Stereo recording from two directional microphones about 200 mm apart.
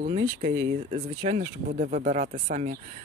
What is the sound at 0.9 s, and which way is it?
Speech, 35° right (ahead or behind).